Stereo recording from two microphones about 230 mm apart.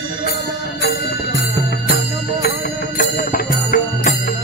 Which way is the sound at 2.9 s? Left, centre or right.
Left.